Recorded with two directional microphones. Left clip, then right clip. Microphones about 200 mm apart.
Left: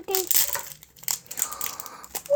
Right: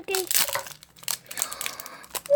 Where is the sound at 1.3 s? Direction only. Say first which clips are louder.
Even; 5° right (ahead or behind).